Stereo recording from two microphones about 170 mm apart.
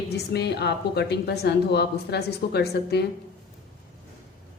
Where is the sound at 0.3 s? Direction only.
80° left.